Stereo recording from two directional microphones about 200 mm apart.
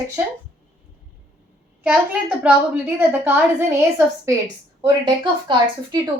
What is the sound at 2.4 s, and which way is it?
A woman's voice, 5° right (ahead or behind).